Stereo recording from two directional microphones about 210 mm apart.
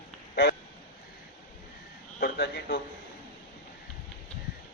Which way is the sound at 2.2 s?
50° left (ahead or behind).